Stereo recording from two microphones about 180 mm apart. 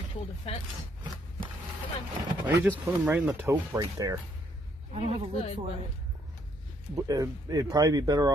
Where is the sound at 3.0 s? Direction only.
10° right (ahead or behind).